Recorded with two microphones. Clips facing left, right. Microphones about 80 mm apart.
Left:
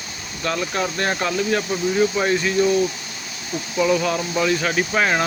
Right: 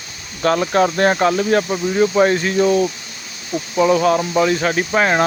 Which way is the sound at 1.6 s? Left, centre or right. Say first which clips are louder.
Right 3 dB; right.